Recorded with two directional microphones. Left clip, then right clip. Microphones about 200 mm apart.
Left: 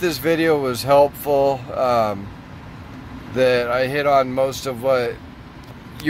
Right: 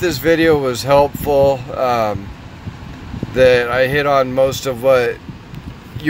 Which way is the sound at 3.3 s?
5° right (ahead or behind).